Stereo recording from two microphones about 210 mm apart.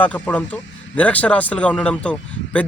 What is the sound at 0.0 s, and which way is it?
A man's voice, 5° left (ahead or behind).